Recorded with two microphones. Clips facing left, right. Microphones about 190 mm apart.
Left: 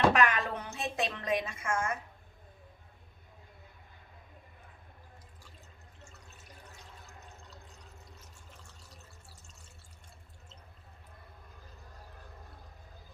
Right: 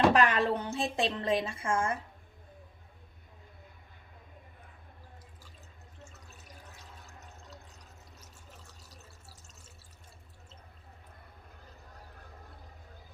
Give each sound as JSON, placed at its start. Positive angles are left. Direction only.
{"t": 0.1, "sound": "a woman's voice", "side_deg": -30}